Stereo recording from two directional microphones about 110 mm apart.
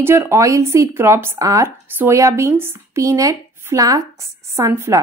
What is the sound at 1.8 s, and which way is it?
Speech, 20° right (ahead or behind).